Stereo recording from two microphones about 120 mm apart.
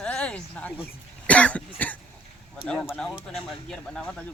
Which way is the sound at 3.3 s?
5° left (ahead or behind).